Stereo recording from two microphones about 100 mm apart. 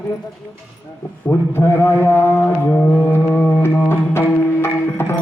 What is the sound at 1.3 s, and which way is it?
Mantra, 20° left (ahead or behind).